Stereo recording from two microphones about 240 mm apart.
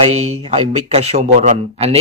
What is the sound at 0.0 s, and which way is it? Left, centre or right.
Speech, right.